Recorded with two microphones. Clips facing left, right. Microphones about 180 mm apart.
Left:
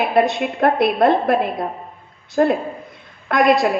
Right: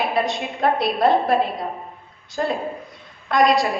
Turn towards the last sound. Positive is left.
turn(degrees=55)  # may be behind; listen again after turning